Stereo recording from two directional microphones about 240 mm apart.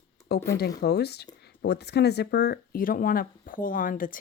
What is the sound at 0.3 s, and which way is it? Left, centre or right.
Speech, left.